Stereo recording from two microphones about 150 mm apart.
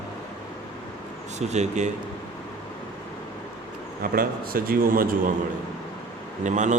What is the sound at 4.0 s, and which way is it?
A man's voice, 75° right (ahead or behind).